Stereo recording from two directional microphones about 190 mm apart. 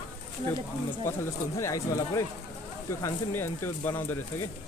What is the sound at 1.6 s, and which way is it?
Speech, 15° left (ahead or behind).